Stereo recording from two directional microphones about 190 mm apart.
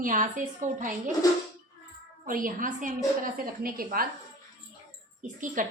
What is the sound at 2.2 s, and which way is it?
A woman's voice, 45° right (ahead or behind).